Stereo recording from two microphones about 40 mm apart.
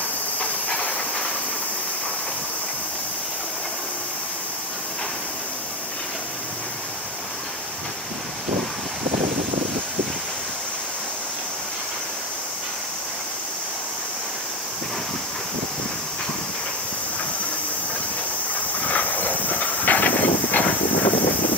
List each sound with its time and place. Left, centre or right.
0.4 s hiss: left
18.9 s hiss: left